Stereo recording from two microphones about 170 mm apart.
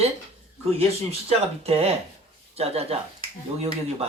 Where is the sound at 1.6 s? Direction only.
35° right (ahead or behind).